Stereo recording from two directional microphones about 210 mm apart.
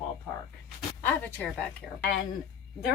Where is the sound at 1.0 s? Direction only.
10° left (ahead or behind).